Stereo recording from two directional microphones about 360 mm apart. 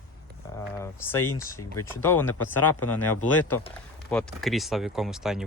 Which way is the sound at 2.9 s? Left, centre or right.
Left.